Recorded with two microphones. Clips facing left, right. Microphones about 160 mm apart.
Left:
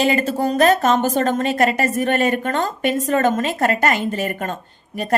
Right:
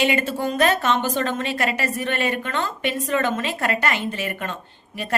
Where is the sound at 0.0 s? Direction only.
40° left (ahead or behind).